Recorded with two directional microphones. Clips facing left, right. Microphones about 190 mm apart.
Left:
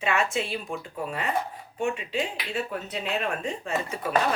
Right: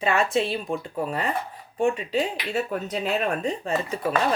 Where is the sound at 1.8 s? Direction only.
35° right (ahead or behind).